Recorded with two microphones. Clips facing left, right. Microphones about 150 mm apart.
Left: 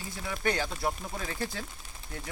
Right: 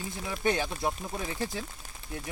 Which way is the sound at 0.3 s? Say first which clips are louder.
Right 2 dB; 20° right (ahead or behind).